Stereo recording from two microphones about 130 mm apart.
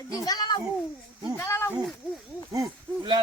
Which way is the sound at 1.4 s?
20° left (ahead or behind).